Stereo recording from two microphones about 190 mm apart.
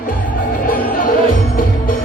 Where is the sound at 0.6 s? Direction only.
50° left (ahead or behind).